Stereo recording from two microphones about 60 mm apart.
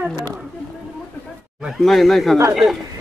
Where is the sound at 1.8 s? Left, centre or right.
Centre.